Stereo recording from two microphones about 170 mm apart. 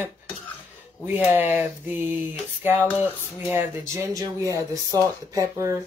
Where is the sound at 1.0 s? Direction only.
10° right (ahead or behind).